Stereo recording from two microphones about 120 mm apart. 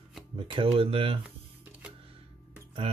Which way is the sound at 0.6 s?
50° right (ahead or behind).